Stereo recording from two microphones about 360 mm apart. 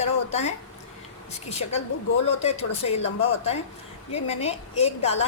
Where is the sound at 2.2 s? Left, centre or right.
Centre.